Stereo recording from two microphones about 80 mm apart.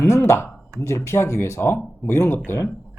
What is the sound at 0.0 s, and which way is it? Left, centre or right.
Speech, left.